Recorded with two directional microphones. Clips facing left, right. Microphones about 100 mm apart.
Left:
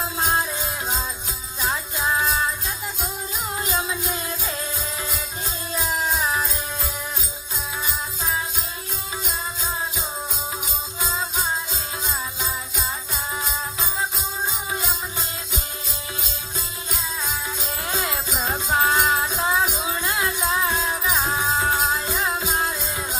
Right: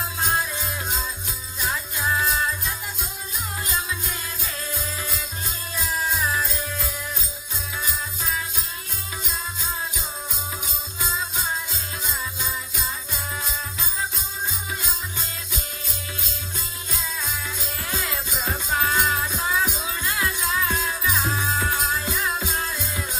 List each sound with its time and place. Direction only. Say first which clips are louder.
1.6 s music: left 2 dB; 25° left (ahead or behind)
3.6 s music: left 3 dB; 20° left (ahead or behind)
6.2 s music: left 1 dB; 25° left (ahead or behind)
13.4 s music: left 3 dB; 20° left (ahead or behind)
17.8 s jingle bell: left 3 dB; 25° left (ahead or behind)
19.1 s music: left 3 dB; 25° left (ahead or behind)